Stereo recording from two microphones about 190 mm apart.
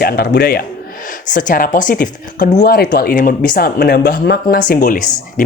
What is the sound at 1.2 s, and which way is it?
Speech, 40° left (ahead or behind).